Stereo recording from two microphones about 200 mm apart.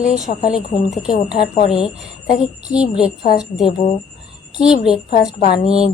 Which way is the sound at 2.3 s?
40° left (ahead or behind).